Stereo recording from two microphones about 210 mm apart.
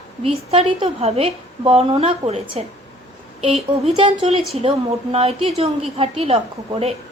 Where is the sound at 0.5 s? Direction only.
30° right (ahead or behind).